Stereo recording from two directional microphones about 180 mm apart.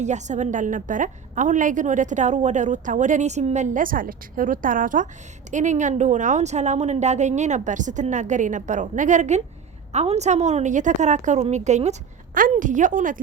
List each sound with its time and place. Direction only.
0.0 s a woman's voice: 40° right (ahead or behind)